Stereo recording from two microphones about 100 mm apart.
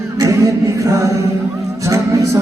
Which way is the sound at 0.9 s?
30° right (ahead or behind).